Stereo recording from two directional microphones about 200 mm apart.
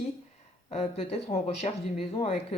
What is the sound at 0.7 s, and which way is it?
Speech, 30° left (ahead or behind).